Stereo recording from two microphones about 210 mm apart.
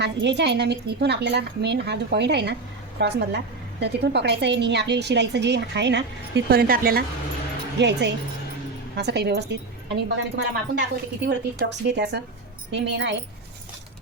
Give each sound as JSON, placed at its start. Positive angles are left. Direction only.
{"t": 0.0, "sound": "a woman's voice", "side_deg": -55}
{"t": 7.8, "sound": "a woman's voice", "side_deg": -55}